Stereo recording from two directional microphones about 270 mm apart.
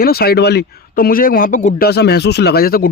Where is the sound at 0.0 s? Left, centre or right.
Left.